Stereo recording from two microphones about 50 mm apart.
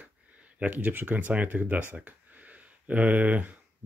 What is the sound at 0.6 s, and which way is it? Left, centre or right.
Speech, right.